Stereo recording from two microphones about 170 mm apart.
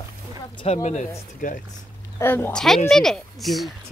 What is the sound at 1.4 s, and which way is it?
Speech, 50° left (ahead or behind).